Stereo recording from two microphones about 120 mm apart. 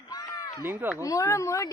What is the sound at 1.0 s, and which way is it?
Speech, 30° left (ahead or behind).